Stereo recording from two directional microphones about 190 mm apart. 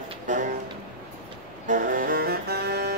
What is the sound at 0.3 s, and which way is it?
Music, 40° right (ahead or behind).